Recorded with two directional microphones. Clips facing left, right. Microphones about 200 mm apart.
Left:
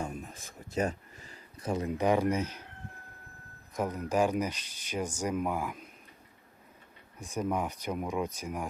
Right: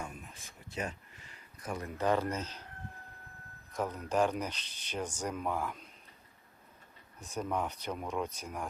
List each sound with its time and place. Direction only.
0.0 s a sound: 40° left (ahead or behind); by 2.6 s 10° left (ahead or behind)
3.7 s speech: 10° left (ahead or behind)
7.2 s speech: 10° left (ahead or behind)